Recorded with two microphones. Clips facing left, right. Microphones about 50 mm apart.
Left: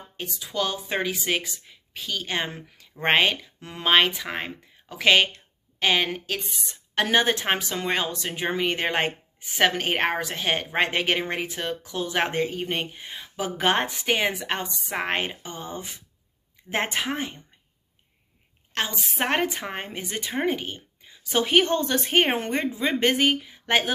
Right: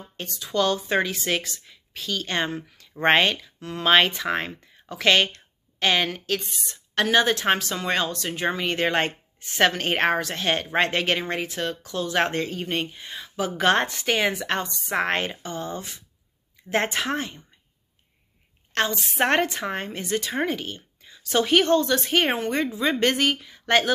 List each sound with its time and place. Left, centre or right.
0.2 s speech: centre
3.9 s a woman's voice: centre
18.7 s a sound: centre
19.1 s speech: centre
19.7 s a woman's voice: centre; by 22.7 s left
22.8 s a woman's voice: left